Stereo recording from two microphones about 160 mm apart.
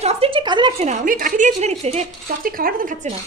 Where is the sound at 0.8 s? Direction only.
55° right (ahead or behind).